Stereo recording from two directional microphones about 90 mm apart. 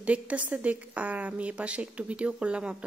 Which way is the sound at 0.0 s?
15° right (ahead or behind).